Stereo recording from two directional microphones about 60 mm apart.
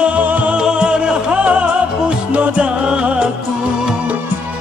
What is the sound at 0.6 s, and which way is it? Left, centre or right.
Music, centre.